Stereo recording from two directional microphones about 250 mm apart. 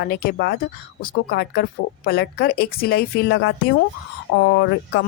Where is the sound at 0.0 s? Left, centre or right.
Left.